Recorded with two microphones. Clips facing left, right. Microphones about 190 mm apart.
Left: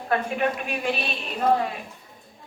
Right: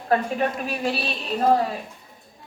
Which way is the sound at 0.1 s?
35° right (ahead or behind).